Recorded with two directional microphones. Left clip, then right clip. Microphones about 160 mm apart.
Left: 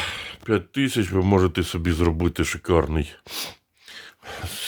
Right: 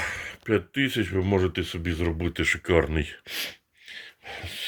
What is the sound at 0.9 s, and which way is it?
Speech, 50° left (ahead or behind).